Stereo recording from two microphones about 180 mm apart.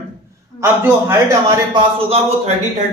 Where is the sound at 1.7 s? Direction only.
35° right (ahead or behind).